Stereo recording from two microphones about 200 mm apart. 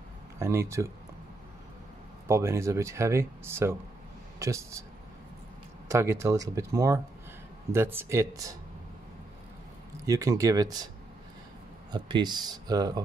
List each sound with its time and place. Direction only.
0.4 s speech: 15° right (ahead or behind)
2.2 s speech: 15° right (ahead or behind)
5.9 s speech: 15° right (ahead or behind)
10.0 s speech: 15° right (ahead or behind)
11.9 s speech: 20° right (ahead or behind)